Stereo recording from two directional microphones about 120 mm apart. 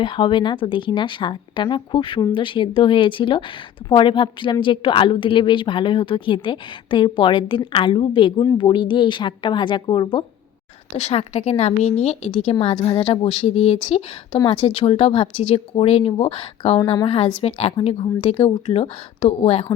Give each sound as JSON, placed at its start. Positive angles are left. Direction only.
{"t": 0.0, "sound": "speech", "side_deg": 40}
{"t": 10.9, "sound": "speech", "side_deg": 60}
{"t": 12.6, "sound": "speech", "side_deg": 45}
{"t": 14.3, "sound": "speech", "side_deg": 45}